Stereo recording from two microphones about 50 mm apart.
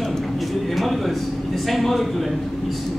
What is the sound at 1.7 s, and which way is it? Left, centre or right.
Speech, centre.